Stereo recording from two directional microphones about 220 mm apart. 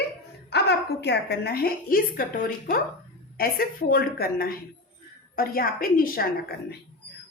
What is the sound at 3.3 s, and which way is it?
A woman's voice, 40° left (ahead or behind).